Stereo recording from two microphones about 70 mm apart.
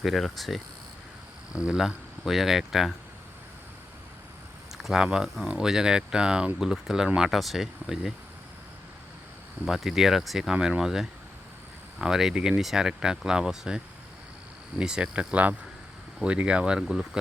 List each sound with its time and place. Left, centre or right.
0.0 s speech: centre
1.5 s speech: centre
4.7 s speech: centre
9.6 s speech: centre